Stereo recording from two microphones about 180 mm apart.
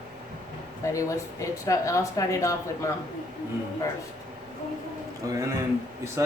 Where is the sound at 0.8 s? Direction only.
20° left (ahead or behind).